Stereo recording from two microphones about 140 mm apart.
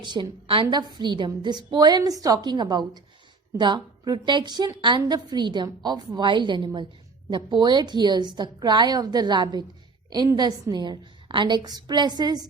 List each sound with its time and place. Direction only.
0.0 s a woman's voice: 35° right (ahead or behind)